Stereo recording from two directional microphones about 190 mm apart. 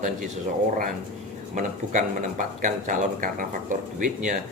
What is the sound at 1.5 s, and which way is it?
Speech, 40° right (ahead or behind).